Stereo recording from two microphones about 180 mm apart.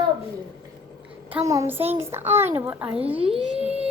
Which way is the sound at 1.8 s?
35° right (ahead or behind).